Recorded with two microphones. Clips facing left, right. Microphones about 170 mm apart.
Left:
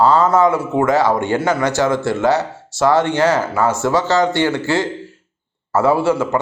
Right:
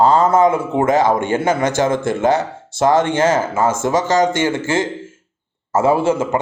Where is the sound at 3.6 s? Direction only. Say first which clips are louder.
Even; 50° right (ahead or behind).